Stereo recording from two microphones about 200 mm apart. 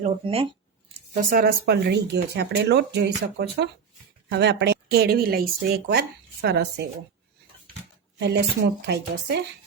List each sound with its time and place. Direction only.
0.0 s speech: 30° right (ahead or behind)
1.1 s speech: 45° right (ahead or behind)
8.2 s speech: 55° right (ahead or behind)